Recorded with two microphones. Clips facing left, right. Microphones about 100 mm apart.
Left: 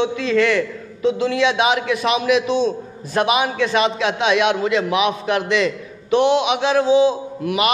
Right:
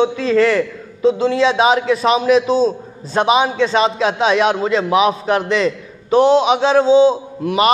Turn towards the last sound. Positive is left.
turn(degrees=-35)  # may be behind; listen again after turning